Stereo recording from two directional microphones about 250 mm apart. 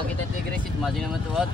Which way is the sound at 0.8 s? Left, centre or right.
Centre.